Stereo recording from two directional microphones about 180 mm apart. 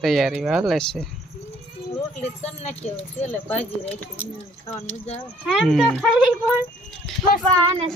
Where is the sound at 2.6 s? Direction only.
35° left (ahead or behind).